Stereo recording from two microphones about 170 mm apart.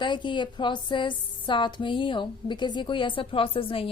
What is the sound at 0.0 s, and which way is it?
A woman's voice, 25° left (ahead or behind).